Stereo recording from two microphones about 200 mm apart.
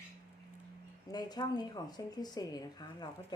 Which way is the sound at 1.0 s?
20° left (ahead or behind).